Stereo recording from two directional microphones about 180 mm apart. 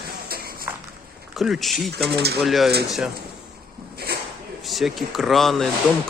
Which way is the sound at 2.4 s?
Centre (ahead or behind).